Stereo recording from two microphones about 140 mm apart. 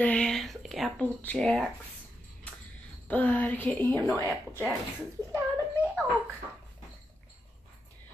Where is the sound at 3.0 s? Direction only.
10° left (ahead or behind).